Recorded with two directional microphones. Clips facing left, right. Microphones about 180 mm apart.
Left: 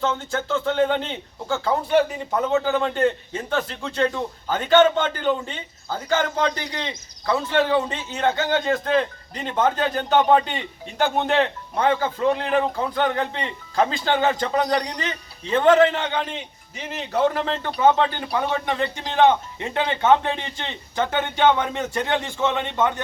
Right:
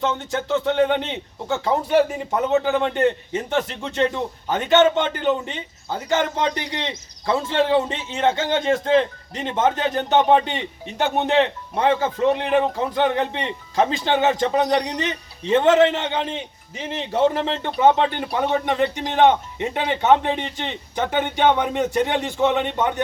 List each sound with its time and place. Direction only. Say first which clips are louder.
0.0 s a man's voice: right 1 dB; 20° right (ahead or behind)